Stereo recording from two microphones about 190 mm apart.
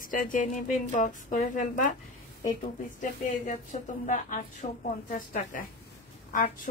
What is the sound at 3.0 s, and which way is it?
Speech, 40° left (ahead or behind).